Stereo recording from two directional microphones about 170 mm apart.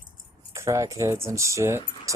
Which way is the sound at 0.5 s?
15° right (ahead or behind).